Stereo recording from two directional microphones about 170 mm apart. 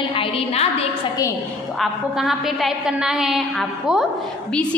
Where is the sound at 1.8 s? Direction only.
Centre (ahead or behind).